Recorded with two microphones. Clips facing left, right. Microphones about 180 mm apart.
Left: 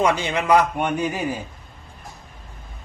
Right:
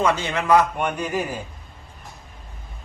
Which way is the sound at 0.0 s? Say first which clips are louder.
Left 1 dB; 15° left (ahead or behind).